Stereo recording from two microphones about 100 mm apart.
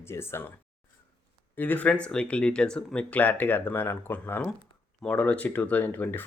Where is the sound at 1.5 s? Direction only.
15° left (ahead or behind).